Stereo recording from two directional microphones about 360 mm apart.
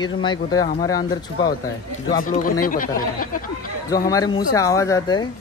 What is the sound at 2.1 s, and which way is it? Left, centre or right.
Speech, left.